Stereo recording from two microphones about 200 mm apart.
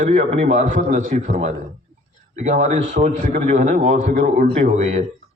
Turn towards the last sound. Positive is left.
turn(degrees=-35)  # may be behind; listen again after turning